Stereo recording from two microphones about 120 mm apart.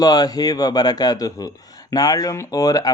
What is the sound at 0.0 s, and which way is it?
A man's voice, 35° left (ahead or behind).